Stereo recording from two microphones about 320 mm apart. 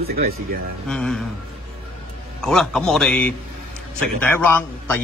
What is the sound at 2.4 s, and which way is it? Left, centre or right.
A man's voice, centre.